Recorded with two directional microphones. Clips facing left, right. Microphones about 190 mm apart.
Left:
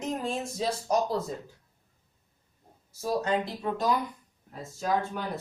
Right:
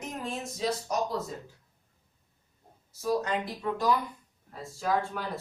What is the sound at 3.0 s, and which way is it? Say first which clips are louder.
Speech: left 1 dB; 30° left (ahead or behind).